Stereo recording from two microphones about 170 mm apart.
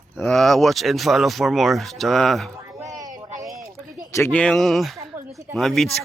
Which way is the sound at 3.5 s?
Centre (ahead or behind).